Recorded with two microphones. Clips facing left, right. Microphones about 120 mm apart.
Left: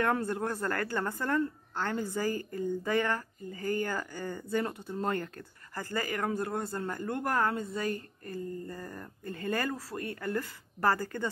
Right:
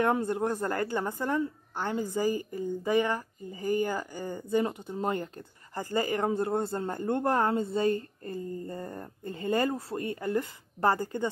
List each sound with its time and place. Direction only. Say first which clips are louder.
0.0 s a woman's voice: right 3 dB; 20° right (ahead or behind)